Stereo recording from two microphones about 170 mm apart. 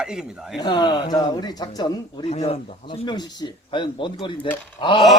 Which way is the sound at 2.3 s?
35° left (ahead or behind).